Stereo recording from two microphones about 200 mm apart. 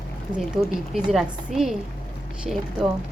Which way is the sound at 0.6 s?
5° right (ahead or behind).